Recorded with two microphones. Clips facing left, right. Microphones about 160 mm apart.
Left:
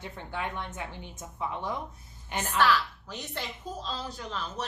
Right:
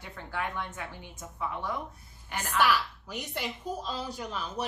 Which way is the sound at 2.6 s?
10° right (ahead or behind).